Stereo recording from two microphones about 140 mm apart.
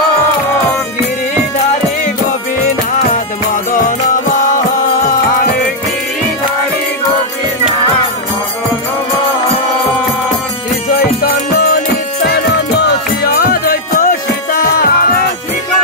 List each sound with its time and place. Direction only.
10.9 s music: 90° left
13.2 s music: 90° left